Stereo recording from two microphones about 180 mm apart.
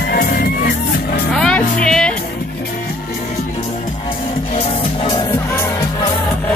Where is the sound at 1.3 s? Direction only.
5° left (ahead or behind).